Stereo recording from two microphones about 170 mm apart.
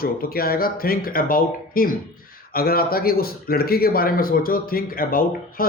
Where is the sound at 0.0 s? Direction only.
60° left (ahead or behind).